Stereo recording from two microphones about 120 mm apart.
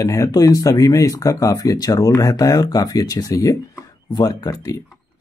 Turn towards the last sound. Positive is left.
turn(degrees=30)  # may be behind; listen again after turning